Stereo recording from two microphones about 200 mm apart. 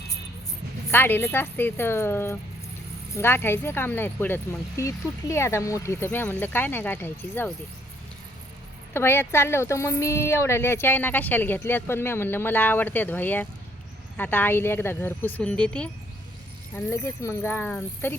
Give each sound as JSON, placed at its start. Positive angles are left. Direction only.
{"t": 0.9, "sound": "speech", "side_deg": 10}
{"t": 8.9, "sound": "speech", "side_deg": 10}